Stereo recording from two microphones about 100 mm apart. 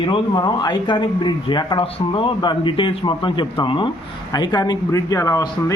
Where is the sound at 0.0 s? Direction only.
45° left (ahead or behind).